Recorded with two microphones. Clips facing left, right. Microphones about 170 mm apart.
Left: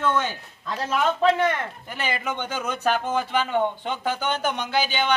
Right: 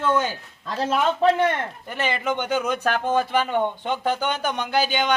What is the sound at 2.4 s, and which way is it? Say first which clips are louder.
A man's voice: even; 15° right (ahead or behind).